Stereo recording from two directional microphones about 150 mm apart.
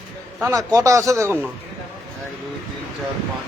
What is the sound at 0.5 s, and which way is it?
Speech, 20° right (ahead or behind).